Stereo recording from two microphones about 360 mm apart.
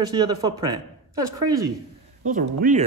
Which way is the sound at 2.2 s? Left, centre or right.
Right.